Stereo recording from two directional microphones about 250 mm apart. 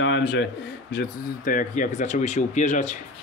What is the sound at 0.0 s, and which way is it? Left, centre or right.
Speech, left.